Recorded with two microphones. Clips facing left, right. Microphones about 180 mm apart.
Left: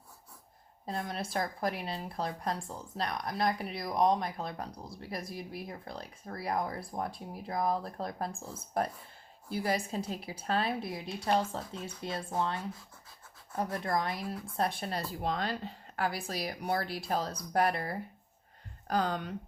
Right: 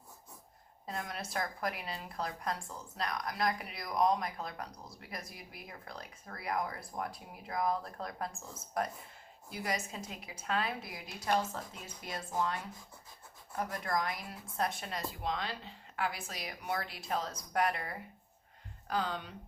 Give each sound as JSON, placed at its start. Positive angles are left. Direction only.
{"t": 0.9, "sound": "speech", "side_deg": 30}
{"t": 18.9, "sound": "speech", "side_deg": 45}